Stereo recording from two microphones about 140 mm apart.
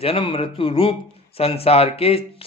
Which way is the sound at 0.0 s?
40° left (ahead or behind).